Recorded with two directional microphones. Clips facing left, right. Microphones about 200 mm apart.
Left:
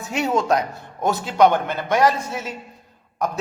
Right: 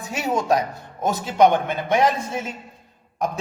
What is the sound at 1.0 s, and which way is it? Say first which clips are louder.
Speech: even; 20° right (ahead or behind).